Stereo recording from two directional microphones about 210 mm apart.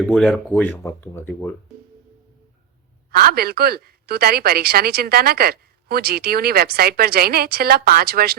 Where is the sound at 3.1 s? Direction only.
45° right (ahead or behind).